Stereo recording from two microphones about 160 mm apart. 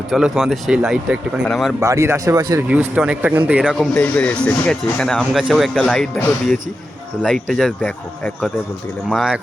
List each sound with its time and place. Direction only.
0.1 s speech: centre (ahead or behind)
1.8 s speech: 20° right (ahead or behind)
2.6 s speech: 5° right (ahead or behind)
3.9 s speech: 10° left (ahead or behind)
7.2 s speech: centre (ahead or behind)